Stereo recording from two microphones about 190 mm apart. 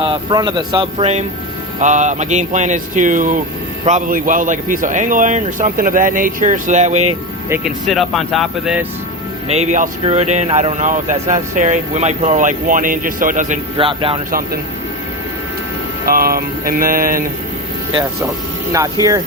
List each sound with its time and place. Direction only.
0.0 s a man's voice: 25° right (ahead or behind)
7.5 s speech: centre (ahead or behind)
9.5 s speech: 35° right (ahead or behind)
13.7 s speech: 30° right (ahead or behind)
14.3 s a man's voice: 50° right (ahead or behind)
16.0 s a man's voice: 50° right (ahead or behind)